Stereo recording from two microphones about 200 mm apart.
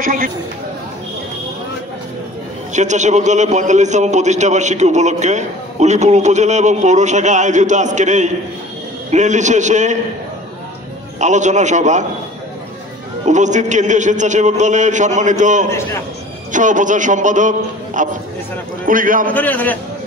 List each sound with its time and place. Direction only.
0.0 s speech: 45° right (ahead or behind)
2.7 s a man's voice: 35° right (ahead or behind)
11.1 s a man's voice: 35° right (ahead or behind)
13.2 s a man's voice: 35° right (ahead or behind)
19.3 s a man's voice: 10° left (ahead or behind)